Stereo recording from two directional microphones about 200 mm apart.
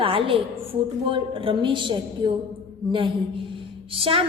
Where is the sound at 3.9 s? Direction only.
25° right (ahead or behind).